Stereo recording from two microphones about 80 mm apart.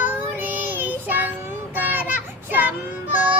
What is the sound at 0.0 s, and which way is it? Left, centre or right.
Child singing, right.